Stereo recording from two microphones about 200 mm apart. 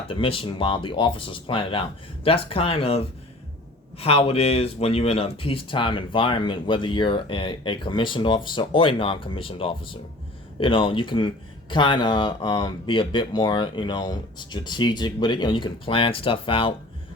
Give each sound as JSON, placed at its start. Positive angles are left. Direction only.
{"t": 0.1, "sound": "speech", "side_deg": 25}